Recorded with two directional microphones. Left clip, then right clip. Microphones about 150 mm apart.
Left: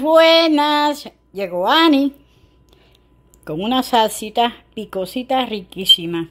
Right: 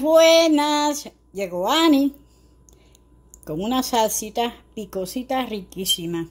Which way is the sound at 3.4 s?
Centre (ahead or behind).